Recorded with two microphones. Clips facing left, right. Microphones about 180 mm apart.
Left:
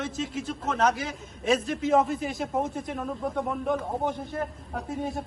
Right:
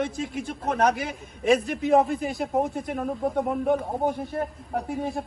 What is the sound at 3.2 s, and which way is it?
Speech, 35° right (ahead or behind).